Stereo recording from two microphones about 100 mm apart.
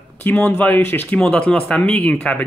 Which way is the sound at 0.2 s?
15° left (ahead or behind).